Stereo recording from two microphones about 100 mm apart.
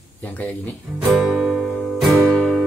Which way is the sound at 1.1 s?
5° right (ahead or behind).